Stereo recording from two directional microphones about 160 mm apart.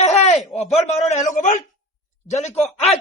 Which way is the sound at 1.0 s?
45° left (ahead or behind).